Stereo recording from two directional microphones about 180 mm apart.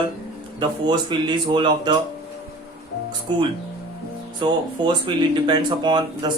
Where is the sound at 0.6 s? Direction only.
25° right (ahead or behind).